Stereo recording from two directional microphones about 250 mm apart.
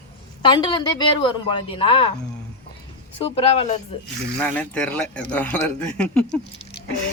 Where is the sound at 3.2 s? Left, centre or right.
Left.